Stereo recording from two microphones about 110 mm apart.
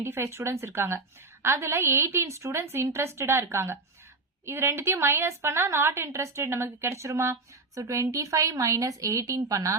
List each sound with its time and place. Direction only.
0.0 s a woman's voice: 25° right (ahead or behind)